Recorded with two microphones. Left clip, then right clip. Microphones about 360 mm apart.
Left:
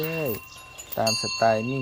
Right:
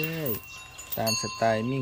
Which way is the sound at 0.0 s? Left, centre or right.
Centre.